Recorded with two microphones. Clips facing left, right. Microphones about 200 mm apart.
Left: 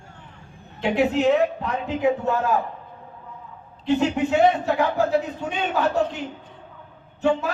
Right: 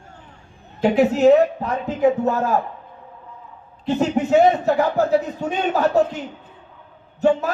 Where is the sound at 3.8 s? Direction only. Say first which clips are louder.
Right 1 dB; 40° right (ahead or behind).